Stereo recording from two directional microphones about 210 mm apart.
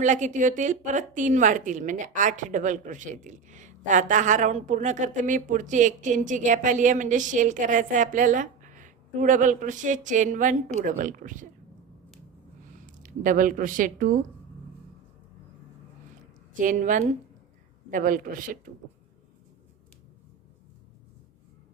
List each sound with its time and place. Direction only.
0.0 s a woman's voice: 35° right (ahead or behind)
12.7 s speech: 40° right (ahead or behind)
16.6 s a woman's voice: 40° right (ahead or behind)